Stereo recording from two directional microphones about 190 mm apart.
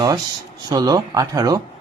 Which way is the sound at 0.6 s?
20° right (ahead or behind).